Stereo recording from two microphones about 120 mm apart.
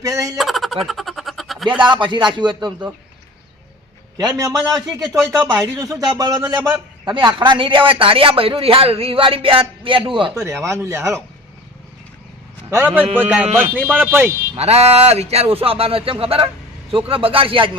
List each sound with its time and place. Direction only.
0.0 s speech: 25° right (ahead or behind)
0.3 s speech: centre (ahead or behind)
0.9 s a sound: centre (ahead or behind)
1.9 s speech: 40° right (ahead or behind)
4.2 s a man's voice: 30° right (ahead or behind); by 10.3 s 45° right (ahead or behind)
10.3 s speech: 20° right (ahead or behind)
12.7 s speech: 15° right (ahead or behind)
14.5 s a man's voice: 60° right (ahead or behind)